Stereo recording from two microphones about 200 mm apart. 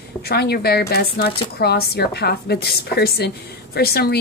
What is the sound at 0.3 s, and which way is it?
A woman's voice, 50° left (ahead or behind).